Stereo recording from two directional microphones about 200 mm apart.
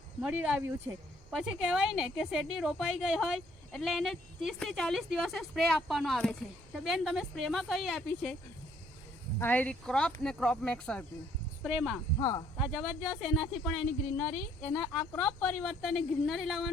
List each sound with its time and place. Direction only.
0.2 s speech: 5° right (ahead or behind)
9.4 s speech: 10° left (ahead or behind)
11.6 s speech: 5° right (ahead or behind)
12.2 s speech: 20° left (ahead or behind)
12.5 s speech: centre (ahead or behind)